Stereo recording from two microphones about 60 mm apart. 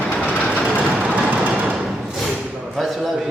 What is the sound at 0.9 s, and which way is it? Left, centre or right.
Music, centre.